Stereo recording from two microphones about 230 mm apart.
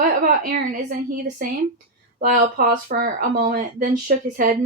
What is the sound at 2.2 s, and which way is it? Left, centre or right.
A woman's voice, right.